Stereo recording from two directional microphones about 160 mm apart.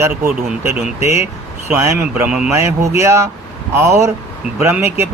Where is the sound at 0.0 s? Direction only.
10° right (ahead or behind).